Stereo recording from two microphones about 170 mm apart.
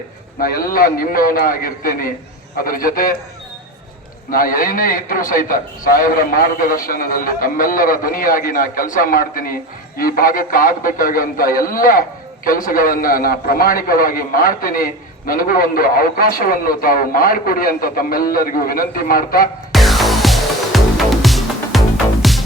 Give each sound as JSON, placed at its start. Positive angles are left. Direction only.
{"t": 0.3, "sound": "speech", "side_deg": 60}
{"t": 4.3, "sound": "speech", "side_deg": 55}
{"t": 19.7, "sound": "music", "side_deg": 0}